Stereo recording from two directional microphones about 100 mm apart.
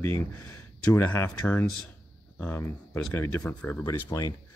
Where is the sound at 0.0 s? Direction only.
25° left (ahead or behind).